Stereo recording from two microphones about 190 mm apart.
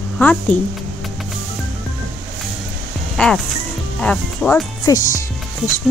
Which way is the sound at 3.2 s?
5° left (ahead or behind).